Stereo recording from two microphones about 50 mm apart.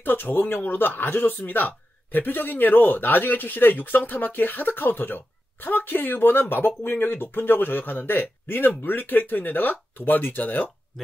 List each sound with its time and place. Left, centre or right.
0.0 s speech: left